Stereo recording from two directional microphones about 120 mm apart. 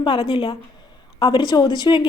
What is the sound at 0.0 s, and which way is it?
A woman's voice, 45° left (ahead or behind).